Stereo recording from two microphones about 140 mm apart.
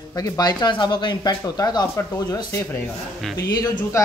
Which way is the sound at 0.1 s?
25° left (ahead or behind).